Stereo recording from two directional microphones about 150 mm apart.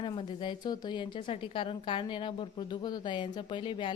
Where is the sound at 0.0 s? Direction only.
35° left (ahead or behind).